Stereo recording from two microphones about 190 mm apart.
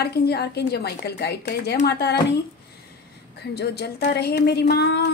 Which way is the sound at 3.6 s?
60° left (ahead or behind).